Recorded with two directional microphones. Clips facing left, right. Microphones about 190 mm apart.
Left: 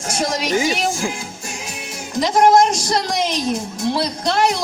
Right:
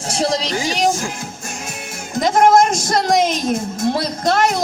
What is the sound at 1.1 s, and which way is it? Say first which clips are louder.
Music: right 1 dB; 45° right (ahead or behind).